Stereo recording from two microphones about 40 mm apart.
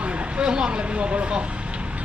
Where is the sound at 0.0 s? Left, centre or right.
Right.